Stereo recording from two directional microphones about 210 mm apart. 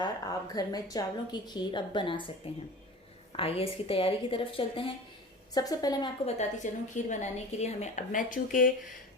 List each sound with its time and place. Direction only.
0.0 s a woman's voice: 20° left (ahead or behind)
6.2 s a woman's voice: 35° left (ahead or behind)